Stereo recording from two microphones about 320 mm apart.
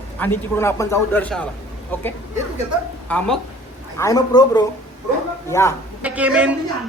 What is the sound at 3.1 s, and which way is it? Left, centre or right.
A woman's voice, centre.